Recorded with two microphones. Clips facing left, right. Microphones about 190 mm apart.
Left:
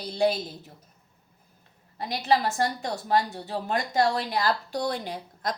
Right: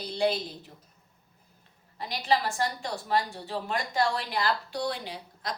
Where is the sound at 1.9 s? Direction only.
45° left (ahead or behind).